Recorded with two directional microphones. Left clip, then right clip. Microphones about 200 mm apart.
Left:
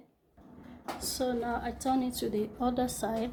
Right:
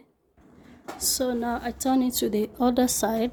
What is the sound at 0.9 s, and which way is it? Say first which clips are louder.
A woman's voice: right 6 dB; 50° right (ahead or behind).